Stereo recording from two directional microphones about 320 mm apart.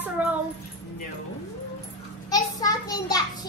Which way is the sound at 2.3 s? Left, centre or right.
Centre.